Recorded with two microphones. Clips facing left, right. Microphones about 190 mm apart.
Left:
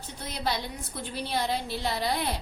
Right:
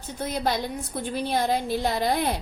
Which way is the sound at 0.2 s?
50° right (ahead or behind).